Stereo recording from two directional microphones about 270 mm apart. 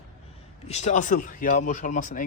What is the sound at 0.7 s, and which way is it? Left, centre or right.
Speech, left.